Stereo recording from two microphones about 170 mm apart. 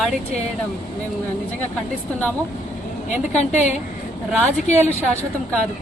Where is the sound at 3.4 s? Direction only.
45° left (ahead or behind).